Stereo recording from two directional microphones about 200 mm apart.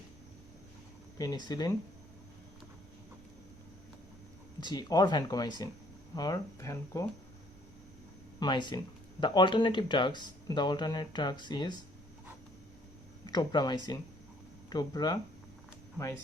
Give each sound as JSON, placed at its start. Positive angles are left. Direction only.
{"t": 1.5, "sound": "speech", "side_deg": 20}
{"t": 4.6, "sound": "speech", "side_deg": 20}
{"t": 8.4, "sound": "speech", "side_deg": 20}
{"t": 13.2, "sound": "speech", "side_deg": 20}